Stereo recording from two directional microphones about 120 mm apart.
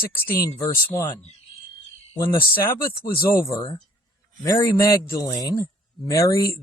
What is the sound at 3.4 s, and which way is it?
A man's voice, 30° left (ahead or behind).